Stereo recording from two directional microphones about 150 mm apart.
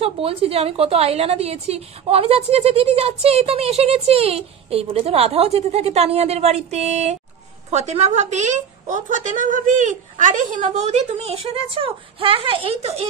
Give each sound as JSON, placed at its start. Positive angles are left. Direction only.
{"t": 0.0, "sound": "a woman's voice", "side_deg": -40}